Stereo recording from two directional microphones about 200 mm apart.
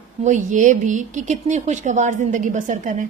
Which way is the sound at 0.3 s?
40° right (ahead or behind).